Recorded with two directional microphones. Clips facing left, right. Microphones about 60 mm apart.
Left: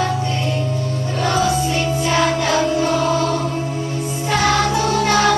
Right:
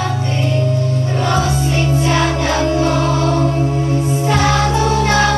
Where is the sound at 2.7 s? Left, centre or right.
Right.